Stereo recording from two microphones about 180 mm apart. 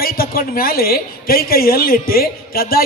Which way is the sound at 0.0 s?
55° left (ahead or behind).